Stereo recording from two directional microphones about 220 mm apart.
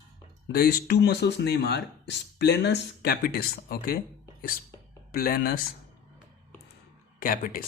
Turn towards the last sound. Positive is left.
turn(degrees=40)  # may be behind; listen again after turning